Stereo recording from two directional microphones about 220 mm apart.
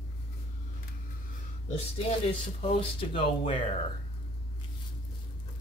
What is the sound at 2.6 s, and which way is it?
Speech, 25° left (ahead or behind).